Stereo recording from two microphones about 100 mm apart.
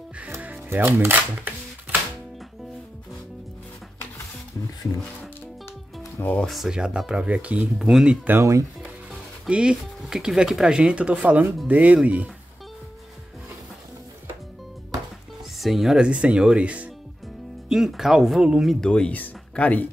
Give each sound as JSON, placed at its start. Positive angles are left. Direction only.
{"t": 0.2, "sound": "music", "side_deg": -15}
{"t": 6.1, "sound": "music", "side_deg": 20}
{"t": 6.4, "sound": "speech", "side_deg": 0}
{"t": 8.3, "sound": "speech", "side_deg": -30}
{"t": 9.5, "sound": "speech", "side_deg": -10}
{"t": 15.5, "sound": "speech", "side_deg": 0}
{"t": 18.9, "sound": "speech", "side_deg": 10}